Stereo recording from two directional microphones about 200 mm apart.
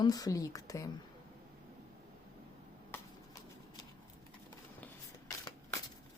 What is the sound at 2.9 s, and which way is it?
Shuffling cards, 15° left (ahead or behind).